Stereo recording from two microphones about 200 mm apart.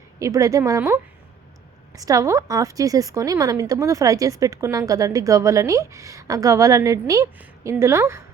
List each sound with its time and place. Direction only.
0.2 s a woman's voice: 15° right (ahead or behind)
2.0 s a woman's voice: 15° right (ahead or behind)